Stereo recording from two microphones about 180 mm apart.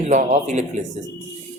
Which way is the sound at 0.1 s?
45° right (ahead or behind).